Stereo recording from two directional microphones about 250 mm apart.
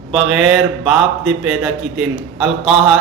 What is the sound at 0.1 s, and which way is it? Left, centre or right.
Speech, centre.